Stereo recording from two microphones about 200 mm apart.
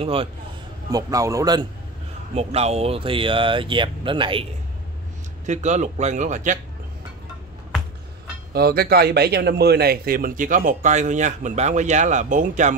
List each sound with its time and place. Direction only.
0.0 s speech: 30° right (ahead or behind)
0.9 s speech: 15° right (ahead or behind)
2.3 s speech: 30° right (ahead or behind)
5.5 s a man's voice: 35° right (ahead or behind)
8.5 s a man's voice: 50° right (ahead or behind)